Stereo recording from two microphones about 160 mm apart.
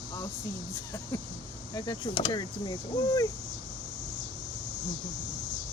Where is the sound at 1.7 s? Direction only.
25° left (ahead or behind).